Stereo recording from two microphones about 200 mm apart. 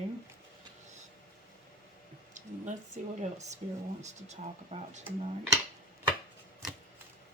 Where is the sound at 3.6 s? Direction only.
30° right (ahead or behind).